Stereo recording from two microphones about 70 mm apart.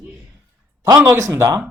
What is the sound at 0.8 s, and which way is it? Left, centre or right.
Speech, right.